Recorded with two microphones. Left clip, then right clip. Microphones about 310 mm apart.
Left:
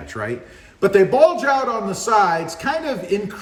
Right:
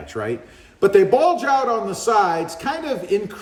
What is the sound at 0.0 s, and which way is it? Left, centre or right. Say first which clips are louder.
A man's voice: right 1 dB; centre.